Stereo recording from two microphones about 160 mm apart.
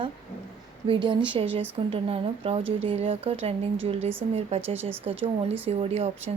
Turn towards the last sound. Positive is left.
turn(degrees=-40)  # may be behind; listen again after turning